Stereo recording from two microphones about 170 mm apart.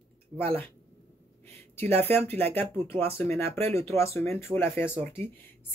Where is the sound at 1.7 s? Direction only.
10° left (ahead or behind).